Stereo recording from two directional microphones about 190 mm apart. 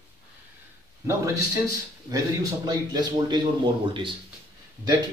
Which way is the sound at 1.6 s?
20° right (ahead or behind).